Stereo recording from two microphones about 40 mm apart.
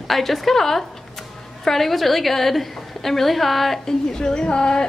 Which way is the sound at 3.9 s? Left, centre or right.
Centre.